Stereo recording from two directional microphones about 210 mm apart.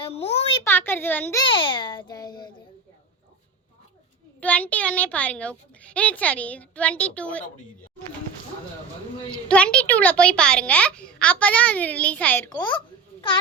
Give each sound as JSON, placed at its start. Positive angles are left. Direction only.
{"t": 0.0, "sound": "a sound", "side_deg": 30}
{"t": 0.6, "sound": "a child's voice", "side_deg": 10}
{"t": 1.5, "sound": "a child's voice", "side_deg": 25}
{"t": 4.4, "sound": "a child's voice", "side_deg": 5}
{"t": 9.3, "sound": "a child's voice", "side_deg": 5}